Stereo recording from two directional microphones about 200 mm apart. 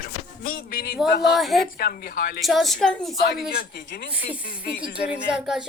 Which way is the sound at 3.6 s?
50° left (ahead or behind).